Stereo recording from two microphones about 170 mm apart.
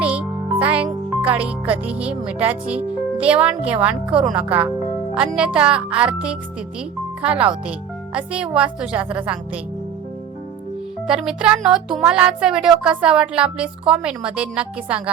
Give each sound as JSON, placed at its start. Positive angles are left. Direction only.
{"t": 0.0, "sound": "a child's voice", "side_deg": -5}
{"t": 11.0, "sound": "speech", "side_deg": -5}